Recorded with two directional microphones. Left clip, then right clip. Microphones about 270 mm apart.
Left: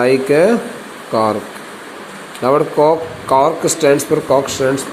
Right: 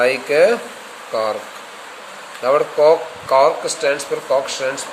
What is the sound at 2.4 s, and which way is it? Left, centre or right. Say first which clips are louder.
Speech: left 1 dB; centre.